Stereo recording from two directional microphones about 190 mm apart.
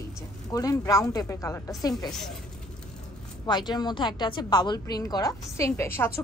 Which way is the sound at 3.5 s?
20° left (ahead or behind).